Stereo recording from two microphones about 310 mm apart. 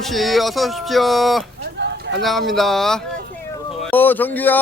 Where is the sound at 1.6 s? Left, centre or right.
Right.